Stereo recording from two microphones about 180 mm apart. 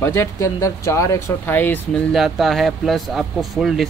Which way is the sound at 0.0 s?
15° left (ahead or behind).